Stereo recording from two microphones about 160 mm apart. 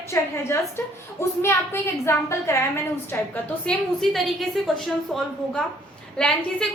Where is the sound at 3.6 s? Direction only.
Centre (ahead or behind).